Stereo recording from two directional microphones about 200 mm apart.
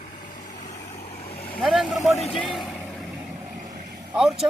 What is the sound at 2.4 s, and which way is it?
Vehicle, centre (ahead or behind).